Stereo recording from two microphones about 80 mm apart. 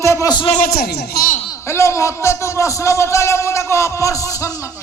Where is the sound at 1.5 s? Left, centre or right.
Left.